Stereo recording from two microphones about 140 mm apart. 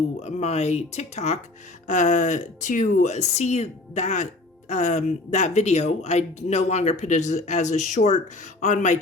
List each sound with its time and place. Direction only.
0.2 s speech: 50° left (ahead or behind)